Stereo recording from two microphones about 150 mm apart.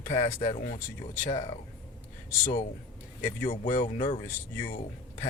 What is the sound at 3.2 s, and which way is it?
Speech, 55° left (ahead or behind).